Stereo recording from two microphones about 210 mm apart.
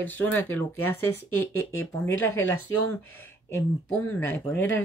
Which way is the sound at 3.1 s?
10° left (ahead or behind).